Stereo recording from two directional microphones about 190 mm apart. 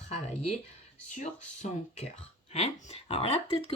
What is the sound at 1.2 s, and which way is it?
Speech, 35° left (ahead or behind).